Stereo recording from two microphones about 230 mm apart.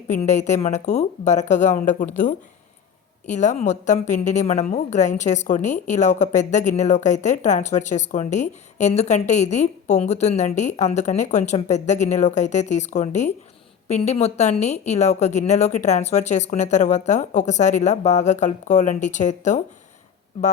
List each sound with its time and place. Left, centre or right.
0.1 s a woman's voice: left
3.2 s a woman's voice: left